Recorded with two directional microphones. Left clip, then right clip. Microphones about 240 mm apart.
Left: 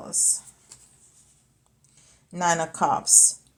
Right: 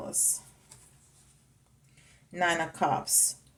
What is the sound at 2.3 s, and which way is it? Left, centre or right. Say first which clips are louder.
Speech: left 4 dB; left.